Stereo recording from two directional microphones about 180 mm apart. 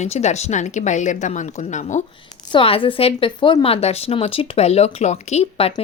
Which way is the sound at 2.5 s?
30° left (ahead or behind).